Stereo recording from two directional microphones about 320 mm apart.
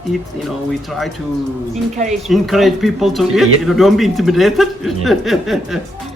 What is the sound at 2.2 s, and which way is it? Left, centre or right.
Speech, centre.